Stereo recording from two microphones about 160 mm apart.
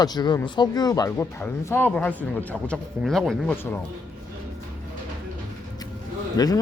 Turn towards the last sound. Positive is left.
turn(degrees=25)  # may be behind; listen again after turning